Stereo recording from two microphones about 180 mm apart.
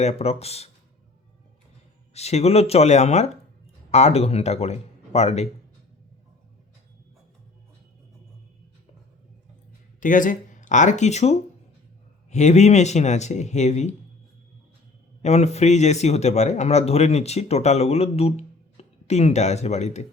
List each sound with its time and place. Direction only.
0.0 s speech: 35° left (ahead or behind)
2.1 s speech: 35° left (ahead or behind)
10.0 s speech: 45° left (ahead or behind)
15.2 s speech: 40° left (ahead or behind)